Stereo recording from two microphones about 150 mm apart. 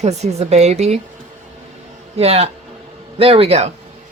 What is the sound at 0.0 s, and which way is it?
Speech, 45° right (ahead or behind).